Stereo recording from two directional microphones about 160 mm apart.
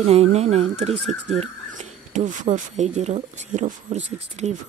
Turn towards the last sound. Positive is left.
turn(degrees=-45)  # may be behind; listen again after turning